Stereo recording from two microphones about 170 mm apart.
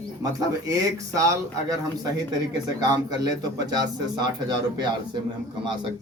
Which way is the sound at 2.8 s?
25° right (ahead or behind).